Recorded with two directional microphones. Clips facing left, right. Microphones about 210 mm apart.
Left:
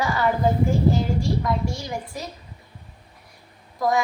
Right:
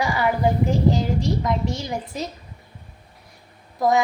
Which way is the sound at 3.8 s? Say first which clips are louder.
Right 3 dB; 20° right (ahead or behind).